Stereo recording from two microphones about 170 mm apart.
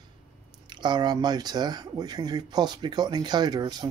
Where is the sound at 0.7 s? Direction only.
25° right (ahead or behind).